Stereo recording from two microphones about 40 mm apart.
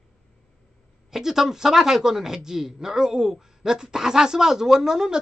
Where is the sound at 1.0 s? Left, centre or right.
Centre.